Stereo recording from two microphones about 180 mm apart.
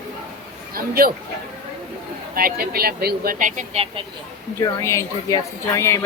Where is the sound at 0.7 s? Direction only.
55° right (ahead or behind).